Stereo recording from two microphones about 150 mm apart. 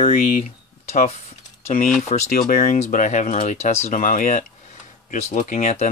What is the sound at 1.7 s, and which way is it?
Speech, 60° left (ahead or behind).